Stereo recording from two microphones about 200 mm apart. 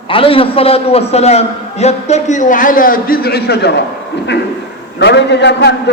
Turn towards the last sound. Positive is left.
turn(degrees=55)  # may be behind; listen again after turning